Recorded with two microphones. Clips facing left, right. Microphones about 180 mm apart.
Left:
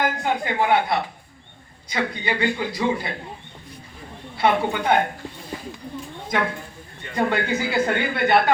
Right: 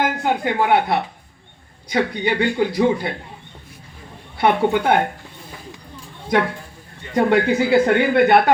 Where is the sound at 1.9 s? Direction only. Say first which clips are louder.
Right 5 dB; 55° right (ahead or behind).